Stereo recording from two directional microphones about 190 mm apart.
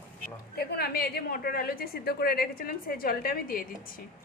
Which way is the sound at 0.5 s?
55° left (ahead or behind).